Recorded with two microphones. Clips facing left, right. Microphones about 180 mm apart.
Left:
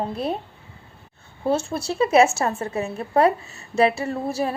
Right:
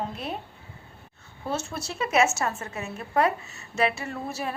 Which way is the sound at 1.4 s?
30° left (ahead or behind).